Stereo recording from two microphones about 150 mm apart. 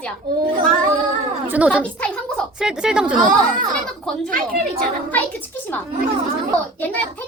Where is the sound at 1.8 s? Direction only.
10° left (ahead or behind).